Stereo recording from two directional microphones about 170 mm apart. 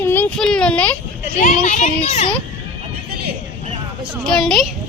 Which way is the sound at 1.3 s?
50° left (ahead or behind).